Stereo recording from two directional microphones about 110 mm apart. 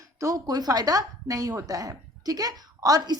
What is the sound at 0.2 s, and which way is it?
A woman's voice, 35° right (ahead or behind).